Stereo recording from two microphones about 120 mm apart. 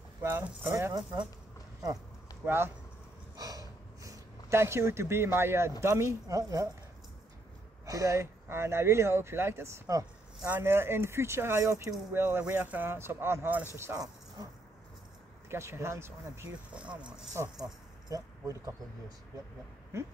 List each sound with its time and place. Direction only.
0.2 s speech: 20° right (ahead or behind)
2.4 s speech: 20° right (ahead or behind)
3.3 s a sound: 30° right (ahead or behind)
5.8 s speech: 25° right (ahead or behind)
7.8 s speech: 30° right (ahead or behind)
15.5 s speech: 20° right (ahead or behind)
16.7 s speech: 10° right (ahead or behind)
18.1 s speech: 25° right (ahead or behind)